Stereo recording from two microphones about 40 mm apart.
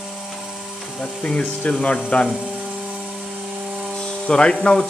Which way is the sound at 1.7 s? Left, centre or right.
Left.